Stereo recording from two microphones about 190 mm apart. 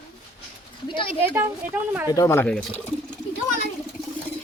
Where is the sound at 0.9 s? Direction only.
25° left (ahead or behind).